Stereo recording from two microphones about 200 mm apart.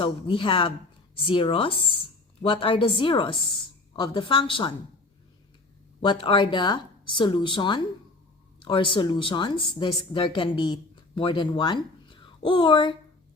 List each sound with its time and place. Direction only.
0.0 s speech: 25° left (ahead or behind)
6.0 s speech: 25° left (ahead or behind)